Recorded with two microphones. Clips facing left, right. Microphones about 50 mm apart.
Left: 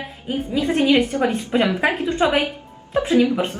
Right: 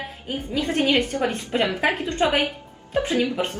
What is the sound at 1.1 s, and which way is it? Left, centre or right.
Speech, left.